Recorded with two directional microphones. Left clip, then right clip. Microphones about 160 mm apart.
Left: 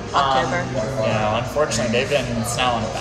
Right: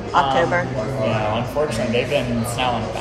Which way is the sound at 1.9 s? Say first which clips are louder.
Even; 60° left (ahead or behind).